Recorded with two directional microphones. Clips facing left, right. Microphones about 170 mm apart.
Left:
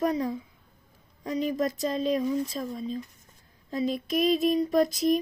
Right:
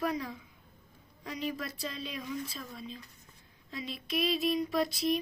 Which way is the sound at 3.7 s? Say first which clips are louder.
Left 9 dB; 45° left (ahead or behind).